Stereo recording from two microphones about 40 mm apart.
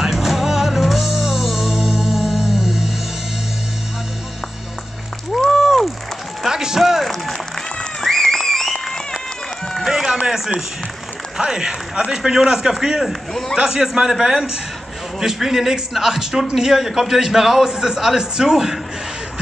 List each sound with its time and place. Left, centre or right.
0.0 s music: centre
5.5 s a sound: centre
6.4 s a sound: centre
6.8 s run: centre
8.0 s music: centre
9.8 s run: centre
10.2 s a sound: centre
11.3 s a man's voice: centre
13.3 s a man's voice: centre
13.6 s a man's voice: centre